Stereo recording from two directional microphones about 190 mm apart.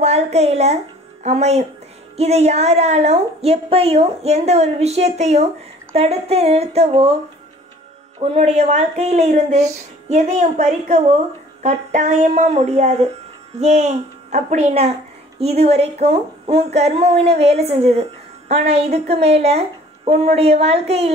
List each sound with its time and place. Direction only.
0.0 s a woman's voice: 35° right (ahead or behind)
8.2 s a woman's voice: 35° right (ahead or behind)